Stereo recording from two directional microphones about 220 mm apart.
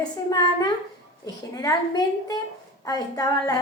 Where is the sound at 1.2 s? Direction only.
15° left (ahead or behind).